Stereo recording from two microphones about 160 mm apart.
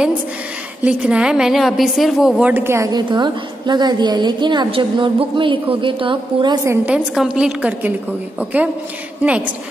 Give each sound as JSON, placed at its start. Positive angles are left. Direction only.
{"t": 0.8, "sound": "speech", "side_deg": -5}
{"t": 6.9, "sound": "a woman's voice", "side_deg": -5}